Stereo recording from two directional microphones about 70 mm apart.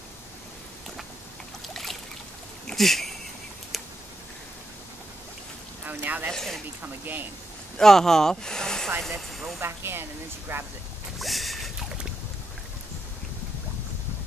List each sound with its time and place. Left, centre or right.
1.7 s boat: centre
2.6 s a sound: centre
5.9 s speech: right
6.3 s speech: centre
6.8 s speech: right
7.7 s speech: centre
9.6 s speech: right
11.1 s a sound: centre